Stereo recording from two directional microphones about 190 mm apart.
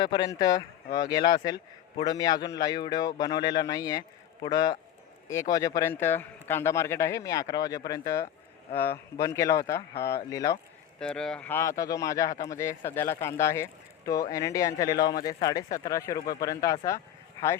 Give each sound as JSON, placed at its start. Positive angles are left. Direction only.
{"t": 0.0, "sound": "a man's voice", "side_deg": 20}
{"t": 11.0, "sound": "speech", "side_deg": 5}